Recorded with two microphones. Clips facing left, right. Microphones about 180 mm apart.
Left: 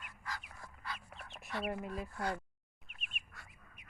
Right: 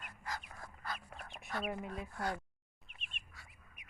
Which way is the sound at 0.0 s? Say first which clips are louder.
Right 2 dB; 40° right (ahead or behind).